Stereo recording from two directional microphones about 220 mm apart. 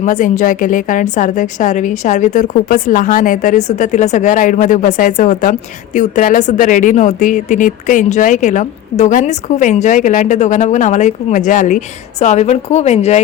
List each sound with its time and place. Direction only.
0.0 s a woman's voice: 35° left (ahead or behind)